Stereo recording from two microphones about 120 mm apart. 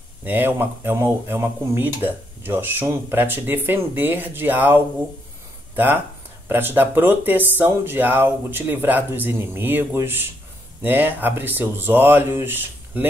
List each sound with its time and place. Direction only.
0.2 s speech: 15° right (ahead or behind)
6.5 s speech: 20° right (ahead or behind)